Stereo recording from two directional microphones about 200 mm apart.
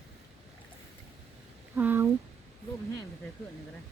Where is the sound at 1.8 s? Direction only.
10° right (ahead or behind).